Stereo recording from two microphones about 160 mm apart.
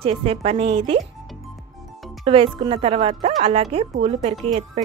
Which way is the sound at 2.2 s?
35° right (ahead or behind).